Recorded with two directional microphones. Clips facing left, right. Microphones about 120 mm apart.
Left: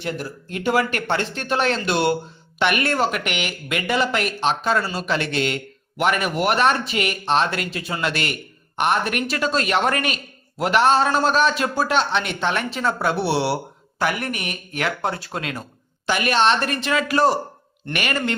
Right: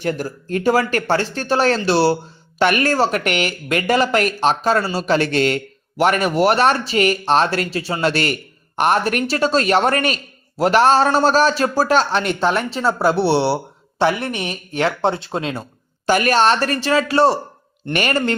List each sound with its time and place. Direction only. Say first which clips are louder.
0.0 s speech: right 6 dB; 45° right (ahead or behind); by 15.6 s 25° right (ahead or behind)
16.0 s speech: right 4 dB; 40° right (ahead or behind)